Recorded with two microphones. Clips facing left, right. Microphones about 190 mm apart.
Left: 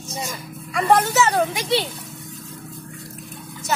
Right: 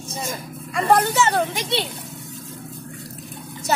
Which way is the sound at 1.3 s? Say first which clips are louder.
Left 2 dB; centre (ahead or behind).